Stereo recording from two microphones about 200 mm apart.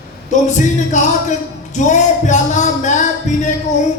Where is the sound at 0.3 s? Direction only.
35° left (ahead or behind).